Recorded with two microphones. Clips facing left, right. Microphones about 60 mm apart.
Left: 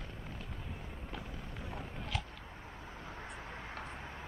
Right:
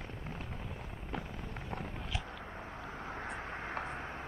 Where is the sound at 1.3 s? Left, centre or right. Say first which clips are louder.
Right 3 dB; right.